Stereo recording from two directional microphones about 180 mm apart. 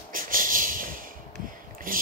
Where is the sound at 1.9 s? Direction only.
50° right (ahead or behind).